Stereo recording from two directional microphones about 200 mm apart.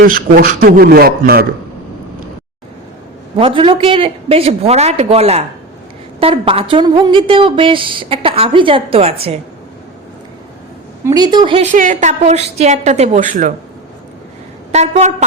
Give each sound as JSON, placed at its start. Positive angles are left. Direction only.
{"t": 0.0, "sound": "a man's voice", "side_deg": -45}
{"t": 3.3, "sound": "a woman's voice", "side_deg": -25}
{"t": 11.0, "sound": "a woman's voice", "side_deg": -20}
{"t": 14.7, "sound": "a woman's voice", "side_deg": -35}